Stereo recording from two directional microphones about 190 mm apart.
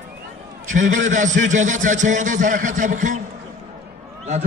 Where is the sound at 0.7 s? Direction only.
40° right (ahead or behind).